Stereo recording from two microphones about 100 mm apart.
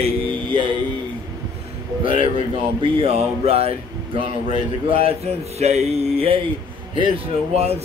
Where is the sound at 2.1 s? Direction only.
60° right (ahead or behind); by 3.7 s 90° right.